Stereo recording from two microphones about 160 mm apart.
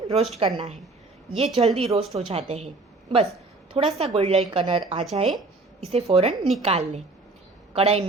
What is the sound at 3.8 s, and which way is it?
A woman's voice, 35° right (ahead or behind).